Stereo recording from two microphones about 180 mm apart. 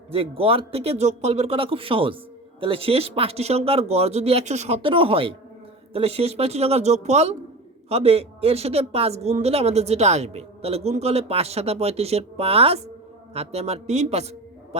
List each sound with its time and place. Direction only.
0.1 s a man's voice: 30° right (ahead or behind)